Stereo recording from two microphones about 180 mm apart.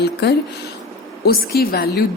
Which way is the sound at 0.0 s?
65° left (ahead or behind).